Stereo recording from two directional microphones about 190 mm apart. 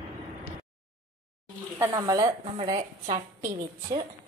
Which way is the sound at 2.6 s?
35° right (ahead or behind).